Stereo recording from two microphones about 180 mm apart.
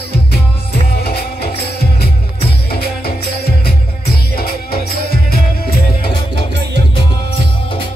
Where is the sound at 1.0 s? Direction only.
65° left (ahead or behind).